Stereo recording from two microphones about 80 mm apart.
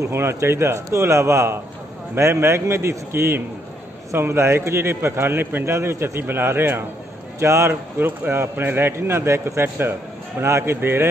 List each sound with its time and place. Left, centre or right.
0.0 s a man's voice: right